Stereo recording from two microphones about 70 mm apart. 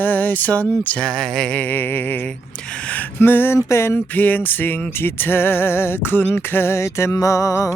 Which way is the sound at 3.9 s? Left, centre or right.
Left.